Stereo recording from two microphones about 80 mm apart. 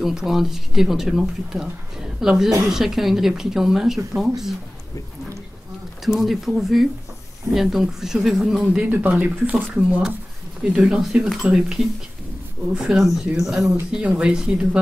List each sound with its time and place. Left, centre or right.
0.0 s speech: centre
6.0 s speech: centre